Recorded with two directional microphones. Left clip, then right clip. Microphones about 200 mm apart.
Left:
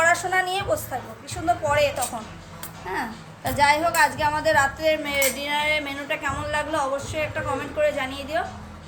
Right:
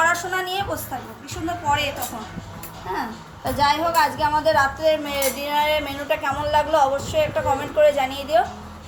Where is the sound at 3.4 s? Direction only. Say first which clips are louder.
Even; 30° left (ahead or behind); by 8.4 s 5° left (ahead or behind).